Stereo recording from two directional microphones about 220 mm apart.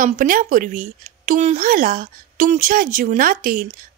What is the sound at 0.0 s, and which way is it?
Speech, 40° right (ahead or behind).